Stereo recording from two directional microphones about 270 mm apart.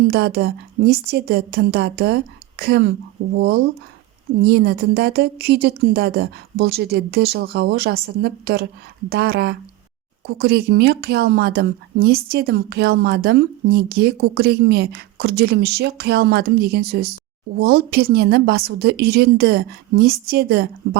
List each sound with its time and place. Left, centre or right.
0.1 s speech: right